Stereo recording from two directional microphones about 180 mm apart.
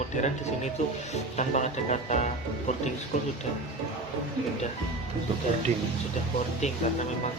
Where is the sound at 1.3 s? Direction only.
40° left (ahead or behind).